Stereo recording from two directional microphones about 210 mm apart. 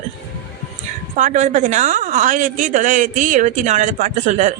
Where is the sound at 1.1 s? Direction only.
35° right (ahead or behind).